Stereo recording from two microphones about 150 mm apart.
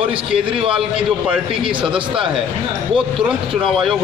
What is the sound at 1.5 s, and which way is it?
Speech, 35° right (ahead or behind).